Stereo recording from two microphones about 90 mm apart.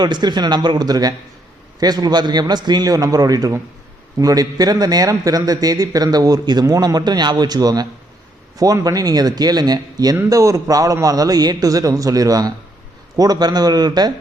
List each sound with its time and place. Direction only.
0.0 s a man's voice: 55° right (ahead or behind)